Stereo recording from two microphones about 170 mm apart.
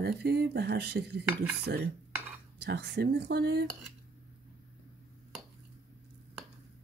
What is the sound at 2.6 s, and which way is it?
Speech, 85° right.